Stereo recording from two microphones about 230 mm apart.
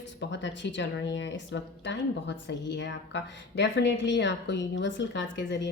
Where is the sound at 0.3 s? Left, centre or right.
Left.